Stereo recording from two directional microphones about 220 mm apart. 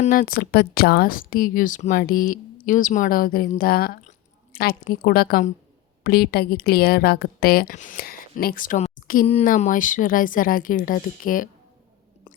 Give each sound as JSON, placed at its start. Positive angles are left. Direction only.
{"t": 0.0, "sound": "a woman's voice", "side_deg": 40}